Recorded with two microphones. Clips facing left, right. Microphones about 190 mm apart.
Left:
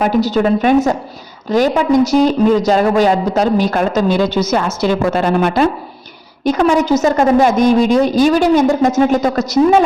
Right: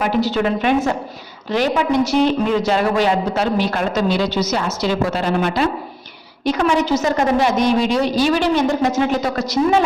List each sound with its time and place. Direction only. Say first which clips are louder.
0.0 s a woman's voice: left 4 dB; 40° left (ahead or behind)